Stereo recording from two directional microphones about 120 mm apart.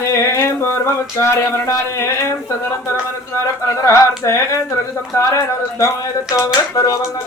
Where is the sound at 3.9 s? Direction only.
25° left (ahead or behind).